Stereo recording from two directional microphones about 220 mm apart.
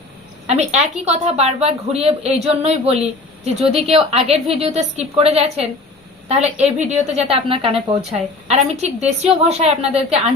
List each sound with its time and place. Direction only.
0.4 s speech: 30° right (ahead or behind)